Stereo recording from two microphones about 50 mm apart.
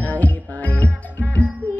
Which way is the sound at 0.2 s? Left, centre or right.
Left.